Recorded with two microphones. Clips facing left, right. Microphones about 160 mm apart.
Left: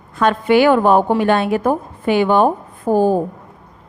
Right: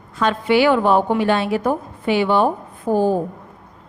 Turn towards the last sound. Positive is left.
turn(degrees=45)  # may be behind; listen again after turning